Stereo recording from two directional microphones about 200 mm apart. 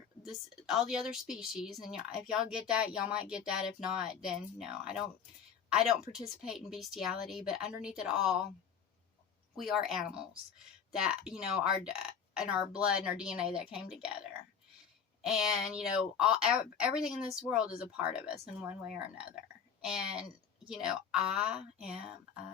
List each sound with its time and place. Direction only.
0.2 s a woman's voice: centre (ahead or behind)
9.6 s a woman's voice: centre (ahead or behind)